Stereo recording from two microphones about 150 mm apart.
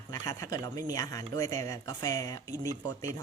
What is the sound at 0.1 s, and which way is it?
Speech, 20° left (ahead or behind).